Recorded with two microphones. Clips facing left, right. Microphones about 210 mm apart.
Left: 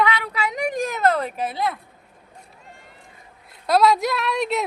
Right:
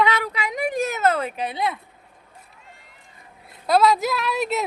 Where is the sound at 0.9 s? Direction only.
Centre (ahead or behind).